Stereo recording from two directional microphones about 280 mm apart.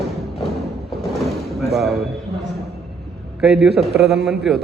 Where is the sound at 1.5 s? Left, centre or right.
Centre.